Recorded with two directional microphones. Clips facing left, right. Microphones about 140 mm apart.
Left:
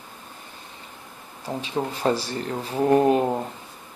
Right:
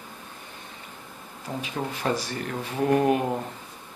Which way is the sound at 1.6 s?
30° left (ahead or behind).